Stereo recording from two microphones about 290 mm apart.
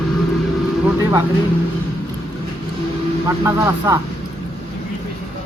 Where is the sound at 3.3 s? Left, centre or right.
Centre.